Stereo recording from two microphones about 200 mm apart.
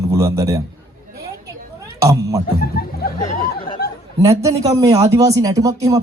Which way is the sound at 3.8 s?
50° left (ahead or behind).